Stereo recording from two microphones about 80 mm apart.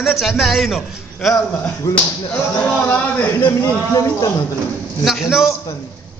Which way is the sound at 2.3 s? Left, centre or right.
Left.